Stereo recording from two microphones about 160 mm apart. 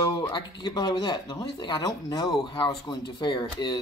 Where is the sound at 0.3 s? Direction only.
25° left (ahead or behind).